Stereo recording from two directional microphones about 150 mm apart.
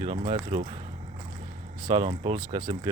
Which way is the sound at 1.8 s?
35° right (ahead or behind).